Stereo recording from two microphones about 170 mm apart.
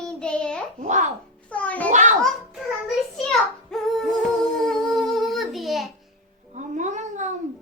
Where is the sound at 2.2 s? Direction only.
Centre (ahead or behind).